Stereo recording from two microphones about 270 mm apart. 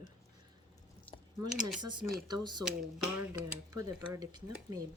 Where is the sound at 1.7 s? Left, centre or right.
Centre.